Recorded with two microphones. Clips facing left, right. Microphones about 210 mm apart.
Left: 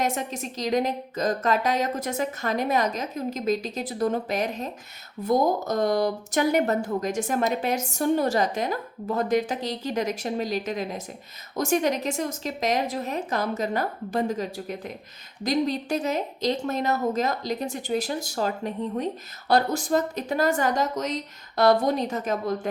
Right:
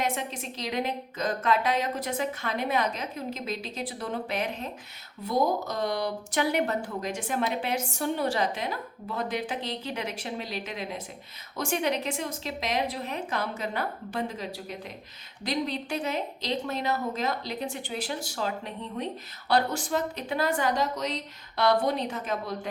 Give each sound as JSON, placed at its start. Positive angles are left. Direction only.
{"t": 0.0, "sound": "a woman's voice", "side_deg": 45}